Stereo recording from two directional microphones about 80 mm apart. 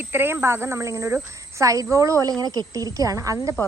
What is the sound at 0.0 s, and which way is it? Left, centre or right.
A woman's voice, right.